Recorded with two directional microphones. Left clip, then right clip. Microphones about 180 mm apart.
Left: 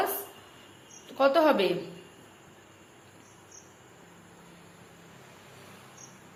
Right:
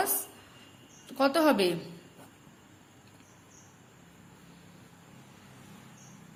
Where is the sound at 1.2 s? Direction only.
35° right (ahead or behind).